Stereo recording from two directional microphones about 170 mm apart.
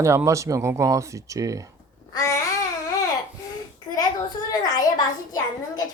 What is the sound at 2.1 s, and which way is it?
Babbling, 20° left (ahead or behind).